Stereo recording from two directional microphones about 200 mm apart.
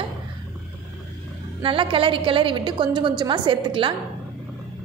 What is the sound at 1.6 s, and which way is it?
A woman's voice, 25° right (ahead or behind).